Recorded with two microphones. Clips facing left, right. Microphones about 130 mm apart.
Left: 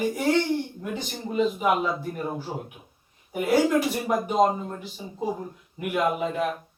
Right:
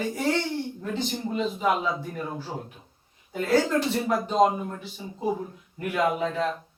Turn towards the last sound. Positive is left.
turn(degrees=15)  # may be behind; listen again after turning